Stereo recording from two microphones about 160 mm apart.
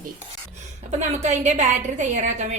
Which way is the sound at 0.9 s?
45° right (ahead or behind).